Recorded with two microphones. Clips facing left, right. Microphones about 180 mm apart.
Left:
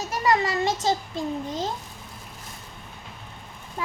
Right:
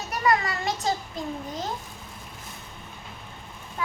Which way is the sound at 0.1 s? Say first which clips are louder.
Left 1 dB; 25° left (ahead or behind).